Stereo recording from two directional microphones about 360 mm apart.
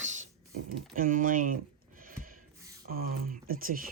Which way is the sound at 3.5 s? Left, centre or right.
Right.